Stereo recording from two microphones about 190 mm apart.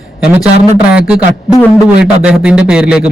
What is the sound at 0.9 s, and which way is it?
Speech, 5° right (ahead or behind).